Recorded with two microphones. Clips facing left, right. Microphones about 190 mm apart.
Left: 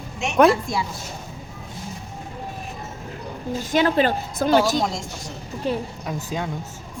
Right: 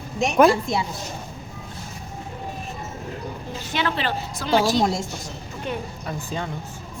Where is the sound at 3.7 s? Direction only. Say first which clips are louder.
Left 6 dB; 45° left (ahead or behind).